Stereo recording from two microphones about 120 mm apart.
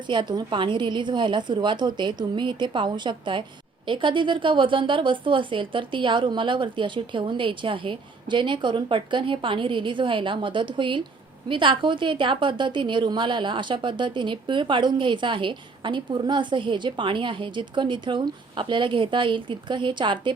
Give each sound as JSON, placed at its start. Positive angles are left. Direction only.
{"t": 0.1, "sound": "a woman's voice", "side_deg": -40}